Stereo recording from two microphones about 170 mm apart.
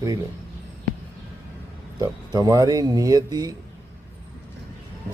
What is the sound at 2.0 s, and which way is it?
A man's voice, 20° right (ahead or behind).